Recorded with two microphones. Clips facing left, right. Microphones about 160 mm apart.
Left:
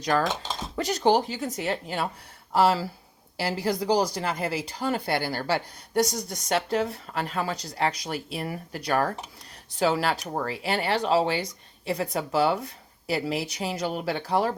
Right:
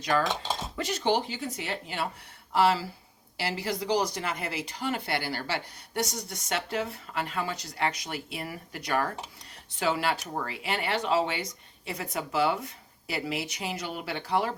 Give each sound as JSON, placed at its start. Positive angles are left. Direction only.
{"t": 0.0, "sound": "speech", "side_deg": 40}